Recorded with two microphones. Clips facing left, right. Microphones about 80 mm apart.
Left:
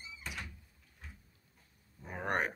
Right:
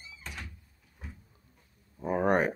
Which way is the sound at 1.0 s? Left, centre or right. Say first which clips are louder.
Right 7 dB; centre.